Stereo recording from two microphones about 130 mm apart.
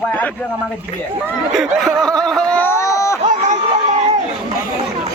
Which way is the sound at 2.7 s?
25° left (ahead or behind).